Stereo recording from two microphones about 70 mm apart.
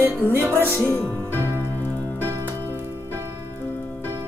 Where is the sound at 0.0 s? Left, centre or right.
Right.